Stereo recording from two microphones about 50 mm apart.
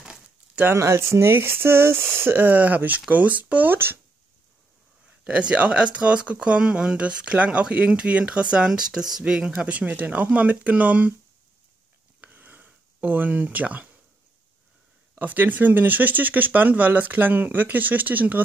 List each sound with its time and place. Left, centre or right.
0.7 s speech: right
3.7 s speech: right
5.2 s speech: right
9.7 s speech: right
12.2 s a sound: right
15.1 s speech: right